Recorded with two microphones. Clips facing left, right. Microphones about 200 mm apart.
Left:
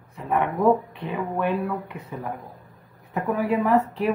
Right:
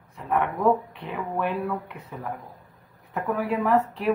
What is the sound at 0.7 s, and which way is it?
Speech, centre (ahead or behind).